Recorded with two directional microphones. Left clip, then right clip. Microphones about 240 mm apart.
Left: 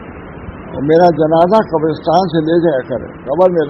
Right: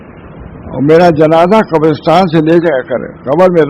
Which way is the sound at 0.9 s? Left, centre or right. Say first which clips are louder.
Right 3 dB; right.